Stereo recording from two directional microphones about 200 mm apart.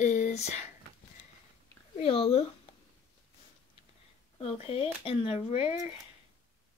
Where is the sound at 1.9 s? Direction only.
30° left (ahead or behind).